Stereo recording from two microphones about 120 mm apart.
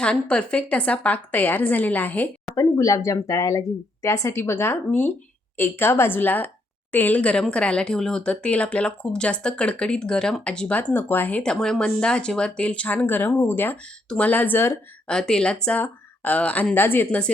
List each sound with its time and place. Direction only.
0.0 s speech: 10° left (ahead or behind)
2.6 s speech: 30° left (ahead or behind)
15.0 s speech: 5° left (ahead or behind)